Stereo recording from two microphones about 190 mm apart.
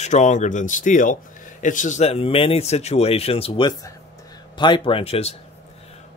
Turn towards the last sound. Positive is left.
turn(degrees=30)  # may be behind; listen again after turning